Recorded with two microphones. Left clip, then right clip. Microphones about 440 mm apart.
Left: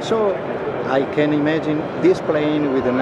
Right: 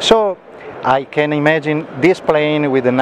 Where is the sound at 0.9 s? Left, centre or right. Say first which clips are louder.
Even; right.